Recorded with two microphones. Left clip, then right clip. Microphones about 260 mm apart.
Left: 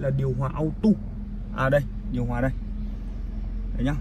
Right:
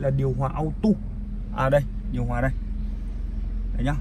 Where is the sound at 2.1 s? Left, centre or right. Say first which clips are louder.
Even; centre.